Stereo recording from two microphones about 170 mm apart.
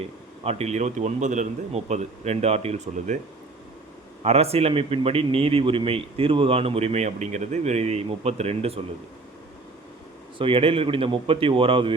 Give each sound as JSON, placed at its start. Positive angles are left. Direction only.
{"t": 0.0, "sound": "a man's voice", "side_deg": -40}
{"t": 4.2, "sound": "a man's voice", "side_deg": -40}
{"t": 10.3, "sound": "a man's voice", "side_deg": -35}